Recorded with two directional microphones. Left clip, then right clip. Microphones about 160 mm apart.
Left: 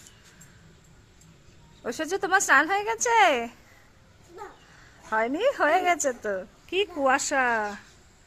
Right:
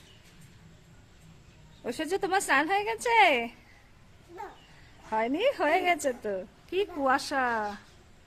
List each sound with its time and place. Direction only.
1.8 s a woman's voice: 5° right (ahead or behind)
5.1 s a woman's voice: 5° right (ahead or behind)